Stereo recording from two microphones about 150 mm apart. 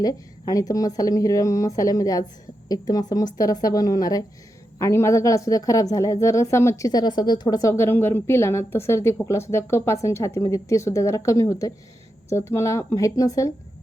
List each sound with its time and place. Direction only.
0.0 s a woman's voice: 25° left (ahead or behind)